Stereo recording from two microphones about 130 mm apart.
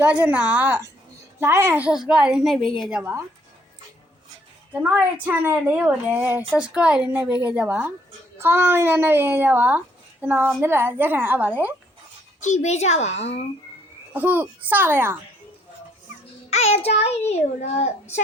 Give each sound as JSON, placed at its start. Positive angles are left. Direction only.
{"t": 0.0, "sound": "a child's voice", "side_deg": -10}
{"t": 3.0, "sound": "a child's voice", "side_deg": -15}
{"t": 4.7, "sound": "a child's voice", "side_deg": -10}
{"t": 12.4, "sound": "a child's voice", "side_deg": 65}
{"t": 14.1, "sound": "a child's voice", "side_deg": -10}
{"t": 16.5, "sound": "a child's voice", "side_deg": 55}